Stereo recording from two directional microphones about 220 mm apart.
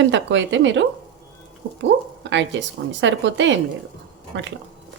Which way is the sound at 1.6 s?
55° right (ahead or behind).